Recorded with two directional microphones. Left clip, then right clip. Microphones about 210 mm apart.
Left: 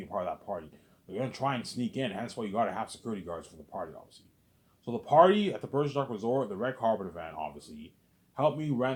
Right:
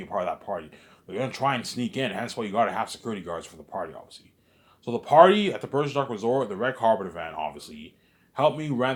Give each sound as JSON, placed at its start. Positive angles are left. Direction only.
{"t": 0.0, "sound": "speech", "side_deg": -25}